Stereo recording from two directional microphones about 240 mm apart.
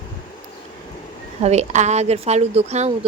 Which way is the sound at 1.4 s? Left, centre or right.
Right.